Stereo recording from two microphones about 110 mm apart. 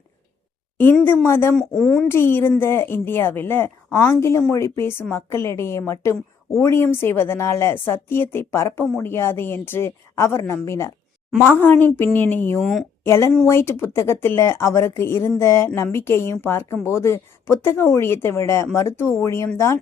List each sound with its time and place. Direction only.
1.0 s a woman's voice: 20° left (ahead or behind)
1.5 s speech: 5° left (ahead or behind)
2.0 s a woman's voice: 20° left (ahead or behind)
12.5 s speech: centre (ahead or behind)
13.1 s a woman's voice: 25° left (ahead or behind)